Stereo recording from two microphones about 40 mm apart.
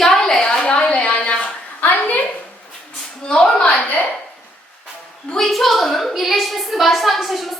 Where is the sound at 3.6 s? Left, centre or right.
Left.